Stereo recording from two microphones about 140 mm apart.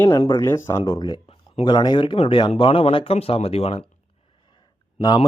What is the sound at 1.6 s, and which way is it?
A man's voice, 30° left (ahead or behind).